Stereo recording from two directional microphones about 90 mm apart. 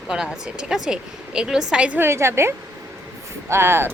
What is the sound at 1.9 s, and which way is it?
A woman's voice, 30° right (ahead or behind).